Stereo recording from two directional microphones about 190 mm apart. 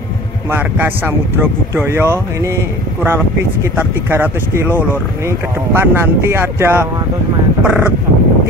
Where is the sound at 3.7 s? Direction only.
10° right (ahead or behind).